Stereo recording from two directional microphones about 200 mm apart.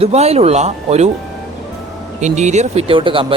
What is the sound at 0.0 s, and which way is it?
Speech, 30° right (ahead or behind).